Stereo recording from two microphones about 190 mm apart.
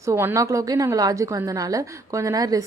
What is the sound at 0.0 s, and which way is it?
A woman's voice, 15° right (ahead or behind).